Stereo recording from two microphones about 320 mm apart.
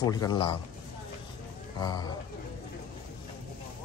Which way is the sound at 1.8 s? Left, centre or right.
Centre.